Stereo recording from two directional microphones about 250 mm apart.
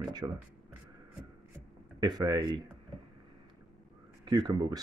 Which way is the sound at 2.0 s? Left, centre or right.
Centre.